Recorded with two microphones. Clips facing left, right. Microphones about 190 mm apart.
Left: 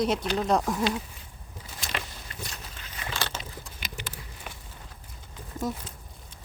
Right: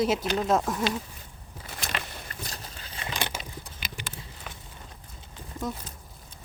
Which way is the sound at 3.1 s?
15° right (ahead or behind).